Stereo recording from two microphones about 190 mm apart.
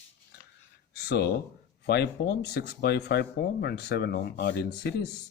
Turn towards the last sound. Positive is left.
turn(degrees=60)  # may be behind; listen again after turning